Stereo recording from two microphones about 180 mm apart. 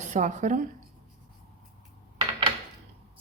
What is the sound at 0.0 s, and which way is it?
Speech, 45° right (ahead or behind).